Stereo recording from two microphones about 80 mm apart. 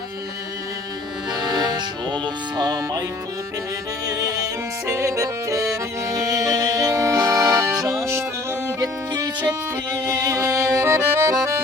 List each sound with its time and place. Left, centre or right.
1.4 s music: right
4.0 s music: right
9.9 s accordion: right